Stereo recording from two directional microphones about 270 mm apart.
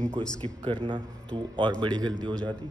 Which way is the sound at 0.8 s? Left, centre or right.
Centre.